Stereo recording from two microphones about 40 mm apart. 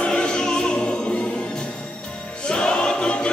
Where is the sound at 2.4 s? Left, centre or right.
Left.